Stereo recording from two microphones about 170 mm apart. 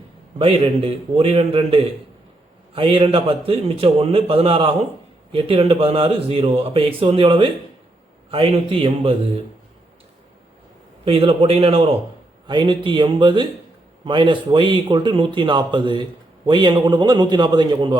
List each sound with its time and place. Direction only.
0.3 s speech: 35° right (ahead or behind)
11.0 s a man's voice: 35° right (ahead or behind)